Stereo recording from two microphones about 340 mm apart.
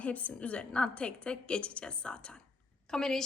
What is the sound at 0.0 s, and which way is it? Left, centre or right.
A woman's voice, centre.